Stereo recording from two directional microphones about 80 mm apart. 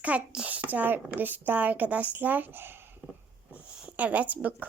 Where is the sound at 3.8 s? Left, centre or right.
Centre.